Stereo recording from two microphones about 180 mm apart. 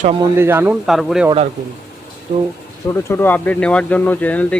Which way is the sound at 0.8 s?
Centre (ahead or behind).